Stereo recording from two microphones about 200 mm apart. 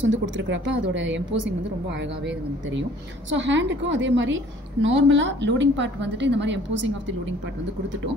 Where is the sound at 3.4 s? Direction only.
65° right (ahead or behind).